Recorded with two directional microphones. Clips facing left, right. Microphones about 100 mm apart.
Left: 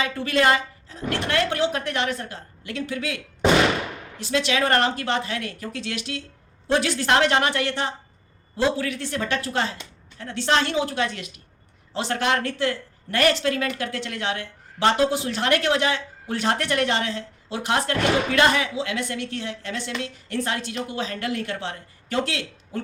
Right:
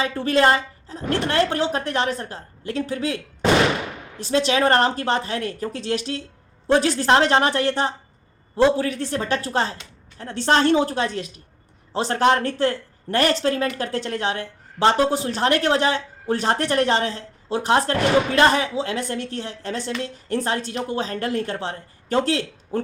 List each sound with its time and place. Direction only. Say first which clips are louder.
0.0 s a woman's voice: right 3 dB; 35° right (ahead or behind)
4.2 s a woman's voice: right 4 dB; 35° right (ahead or behind)